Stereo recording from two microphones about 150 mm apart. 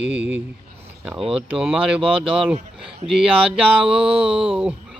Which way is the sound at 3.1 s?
5° right (ahead or behind).